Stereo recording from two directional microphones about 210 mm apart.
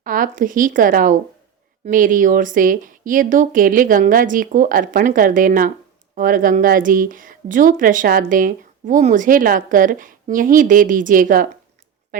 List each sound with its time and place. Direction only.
0.0 s a woman's voice: 40° right (ahead or behind)